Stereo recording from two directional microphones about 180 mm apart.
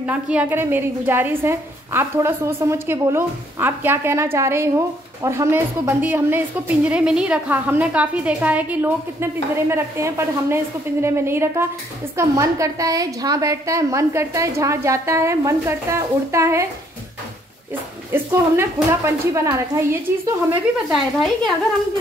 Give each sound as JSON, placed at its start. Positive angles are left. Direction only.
{"t": 0.0, "sound": "a woman's voice", "side_deg": -5}
{"t": 18.1, "sound": "a woman's voice", "side_deg": -15}